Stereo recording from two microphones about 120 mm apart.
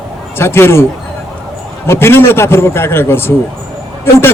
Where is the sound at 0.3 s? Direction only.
20° left (ahead or behind).